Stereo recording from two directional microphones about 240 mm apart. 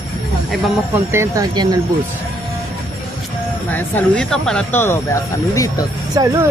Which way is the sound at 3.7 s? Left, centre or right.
Centre.